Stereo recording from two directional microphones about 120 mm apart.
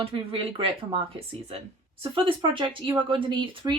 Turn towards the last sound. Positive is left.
turn(degrees=-40)  # may be behind; listen again after turning